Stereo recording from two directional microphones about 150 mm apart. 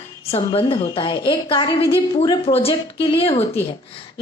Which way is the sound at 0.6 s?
30° left (ahead or behind).